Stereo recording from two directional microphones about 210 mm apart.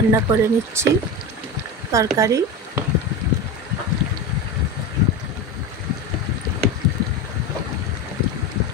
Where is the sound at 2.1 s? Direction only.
15° right (ahead or behind).